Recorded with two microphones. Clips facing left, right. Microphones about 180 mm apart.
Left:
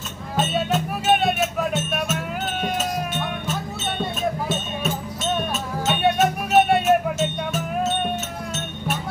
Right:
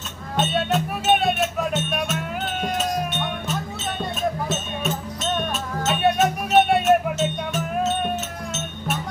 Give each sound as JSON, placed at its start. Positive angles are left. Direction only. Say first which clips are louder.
{"t": 0.4, "sound": "music", "louder": "even", "side_deg": 0}